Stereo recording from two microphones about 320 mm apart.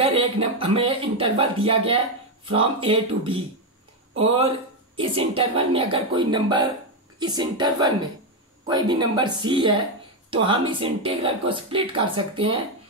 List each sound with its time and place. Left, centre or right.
0.0 s speech: centre